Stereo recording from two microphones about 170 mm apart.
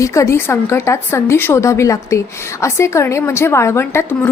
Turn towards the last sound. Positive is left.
turn(degrees=15)  # may be behind; listen again after turning